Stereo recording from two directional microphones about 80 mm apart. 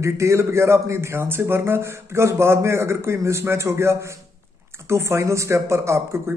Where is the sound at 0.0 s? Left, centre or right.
Right.